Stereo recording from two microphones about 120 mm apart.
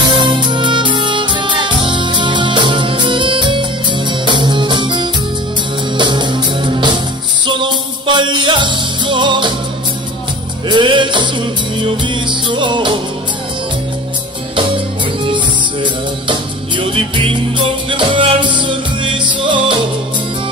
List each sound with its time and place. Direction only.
0.0 s music: 40° right (ahead or behind)
10.7 s music: 40° right (ahead or behind)
15.2 s music: 45° right (ahead or behind)